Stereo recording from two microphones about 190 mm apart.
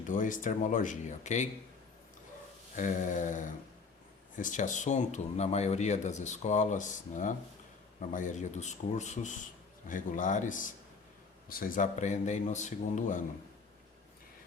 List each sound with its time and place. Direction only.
0.0 s speech: 45° left (ahead or behind)
2.7 s speech: 40° left (ahead or behind)